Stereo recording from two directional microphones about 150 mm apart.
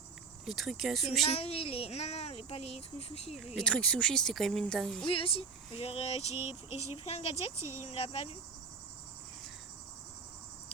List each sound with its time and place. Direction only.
0.4 s speech: centre (ahead or behind)
1.3 s speech: 40° left (ahead or behind)
3.3 s speech: centre (ahead or behind)
5.0 s speech: 40° left (ahead or behind)
7.6 s speech: 15° right (ahead or behind)
7.9 s speech: 40° left (ahead or behind)